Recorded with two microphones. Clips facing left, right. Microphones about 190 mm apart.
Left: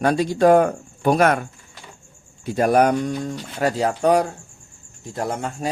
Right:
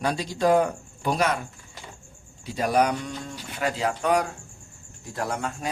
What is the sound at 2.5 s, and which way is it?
Speech, 50° left (ahead or behind).